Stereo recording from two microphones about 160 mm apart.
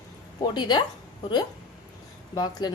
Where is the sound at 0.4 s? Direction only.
30° left (ahead or behind).